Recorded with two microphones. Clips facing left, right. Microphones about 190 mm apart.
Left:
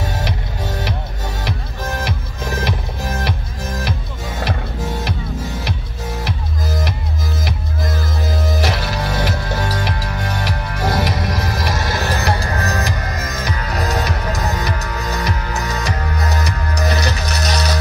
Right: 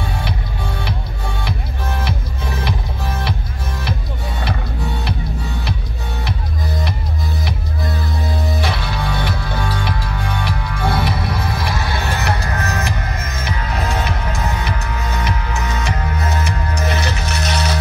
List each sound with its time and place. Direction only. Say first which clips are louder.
2.5 s music: left 2 dB; 45° left (ahead or behind)
8.3 s music: left 2 dB; 85° left
8.5 s music: left 2 dB; 40° left (ahead or behind)